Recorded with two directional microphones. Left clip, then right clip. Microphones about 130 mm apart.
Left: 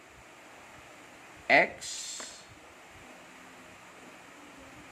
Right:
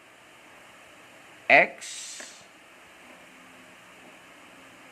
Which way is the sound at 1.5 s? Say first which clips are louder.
Right 5 dB; 40° right (ahead or behind).